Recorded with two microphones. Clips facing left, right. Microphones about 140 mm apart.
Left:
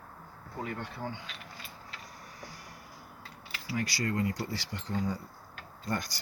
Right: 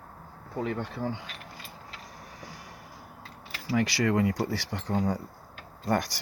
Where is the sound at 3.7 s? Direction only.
80° right.